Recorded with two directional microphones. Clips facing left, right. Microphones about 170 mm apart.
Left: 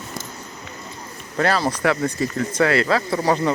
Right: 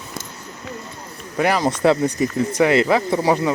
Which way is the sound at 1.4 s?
15° right (ahead or behind).